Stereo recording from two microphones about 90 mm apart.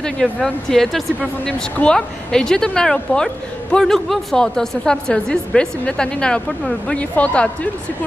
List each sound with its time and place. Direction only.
0.0 s a woman's voice: 5° left (ahead or behind)